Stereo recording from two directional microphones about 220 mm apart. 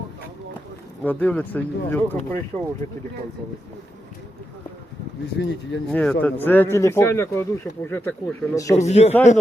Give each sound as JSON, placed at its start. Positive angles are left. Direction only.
{"t": 1.0, "sound": "speech", "side_deg": 5}
{"t": 5.4, "sound": "speech", "side_deg": 50}
{"t": 5.9, "sound": "speech", "side_deg": 5}
{"t": 8.7, "sound": "a man's voice", "side_deg": 30}